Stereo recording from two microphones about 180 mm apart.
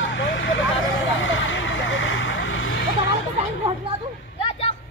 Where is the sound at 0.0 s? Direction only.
90° left.